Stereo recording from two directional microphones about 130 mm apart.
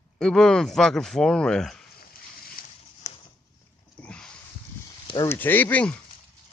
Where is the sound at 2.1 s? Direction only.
90° left.